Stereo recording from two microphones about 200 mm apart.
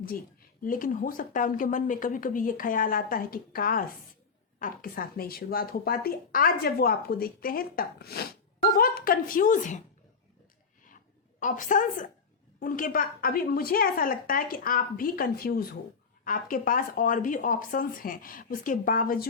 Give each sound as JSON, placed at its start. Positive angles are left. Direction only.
{"t": 0.6, "sound": "speech", "side_deg": 45}
{"t": 11.3, "sound": "a woman's voice", "side_deg": 40}